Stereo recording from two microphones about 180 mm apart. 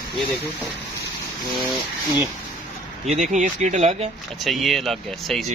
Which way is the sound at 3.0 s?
40° right (ahead or behind).